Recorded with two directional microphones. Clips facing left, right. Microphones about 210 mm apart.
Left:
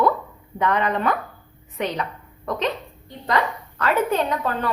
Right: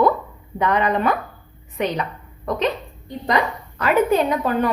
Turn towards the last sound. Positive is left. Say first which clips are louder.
# right 4 dB
turn(degrees=-15)  # may be behind; listen again after turning